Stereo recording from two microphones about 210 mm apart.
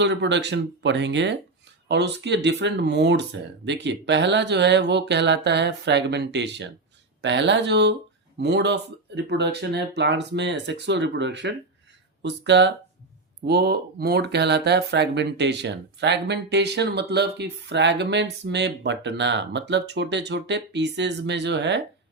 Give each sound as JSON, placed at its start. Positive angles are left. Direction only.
{"t": 0.0, "sound": "speech", "side_deg": -55}